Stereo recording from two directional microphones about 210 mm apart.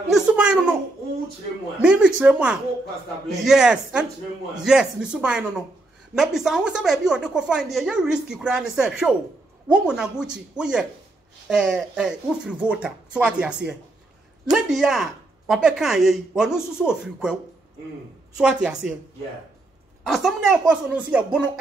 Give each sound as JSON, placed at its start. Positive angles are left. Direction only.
{"t": 0.1, "sound": "a woman's voice", "side_deg": -5}
{"t": 1.8, "sound": "a woman's voice", "side_deg": -5}
{"t": 18.4, "sound": "a woman's voice", "side_deg": -5}
{"t": 20.0, "sound": "a woman's voice", "side_deg": 0}